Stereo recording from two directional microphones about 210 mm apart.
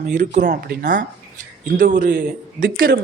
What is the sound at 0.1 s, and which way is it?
Speech, 35° right (ahead or behind).